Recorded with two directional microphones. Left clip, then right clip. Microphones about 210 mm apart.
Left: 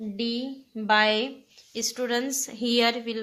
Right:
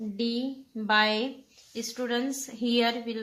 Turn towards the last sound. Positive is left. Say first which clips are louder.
# left 3 dB
turn(degrees=50)  # may be behind; listen again after turning